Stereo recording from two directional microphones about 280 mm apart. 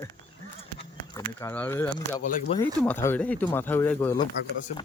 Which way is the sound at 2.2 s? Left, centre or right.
Left.